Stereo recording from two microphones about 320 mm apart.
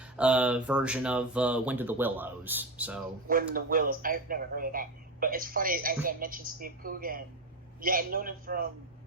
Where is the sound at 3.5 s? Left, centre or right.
Right.